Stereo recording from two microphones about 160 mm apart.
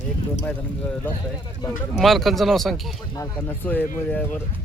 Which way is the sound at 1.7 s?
Centre (ahead or behind).